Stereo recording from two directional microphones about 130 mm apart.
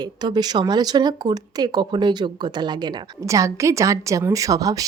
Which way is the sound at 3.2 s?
25° right (ahead or behind).